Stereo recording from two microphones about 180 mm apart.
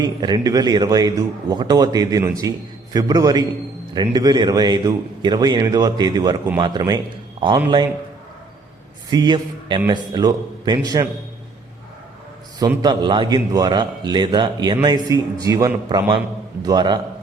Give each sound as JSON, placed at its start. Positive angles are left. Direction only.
{"t": 0.0, "sound": "a man's voice", "side_deg": -25}
{"t": 9.0, "sound": "a man's voice", "side_deg": -25}
{"t": 12.5, "sound": "a man's voice", "side_deg": -20}